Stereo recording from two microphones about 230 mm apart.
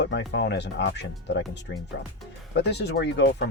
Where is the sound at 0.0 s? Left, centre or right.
Left.